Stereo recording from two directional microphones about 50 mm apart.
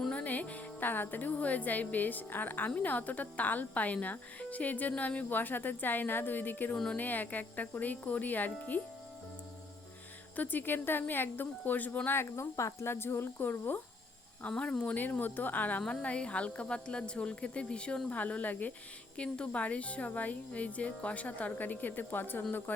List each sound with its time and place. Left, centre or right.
0.1 s speech: left
5.3 s speech: left
10.3 s a woman's voice: left
12.2 s speech: left
12.9 s speech: left
13.4 s a woman's voice: left
14.4 s a woman's voice: left
14.9 s speech: left
15.9 s a woman's voice: left
18.1 s a woman's voice: left